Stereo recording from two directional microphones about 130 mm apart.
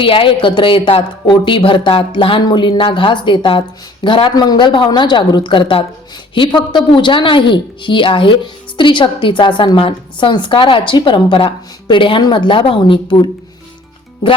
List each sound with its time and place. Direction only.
0.0 s a woman's voice: 45° left (ahead or behind)